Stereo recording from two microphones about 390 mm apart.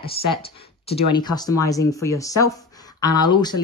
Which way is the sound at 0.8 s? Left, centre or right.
Centre.